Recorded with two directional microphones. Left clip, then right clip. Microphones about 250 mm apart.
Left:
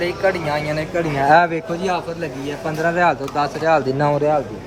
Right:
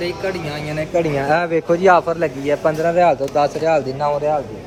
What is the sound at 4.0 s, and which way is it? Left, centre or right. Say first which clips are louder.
Speech: left 1 dB; left.